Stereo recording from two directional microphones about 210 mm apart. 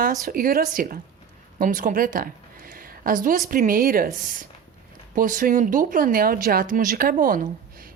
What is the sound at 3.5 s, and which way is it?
Speech, 40° right (ahead or behind).